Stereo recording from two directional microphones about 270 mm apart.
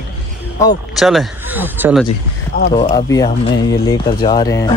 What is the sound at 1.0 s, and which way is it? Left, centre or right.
Speech, centre.